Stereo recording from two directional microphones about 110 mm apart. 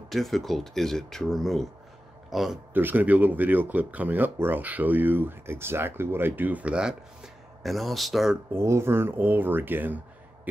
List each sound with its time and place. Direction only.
0.1 s speech: centre (ahead or behind)
2.7 s speech: 15° right (ahead or behind); by 8.4 s centre (ahead or behind)
8.5 s speech: 25° right (ahead or behind)